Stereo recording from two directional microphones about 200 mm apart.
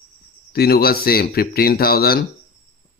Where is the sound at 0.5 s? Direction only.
50° left (ahead or behind).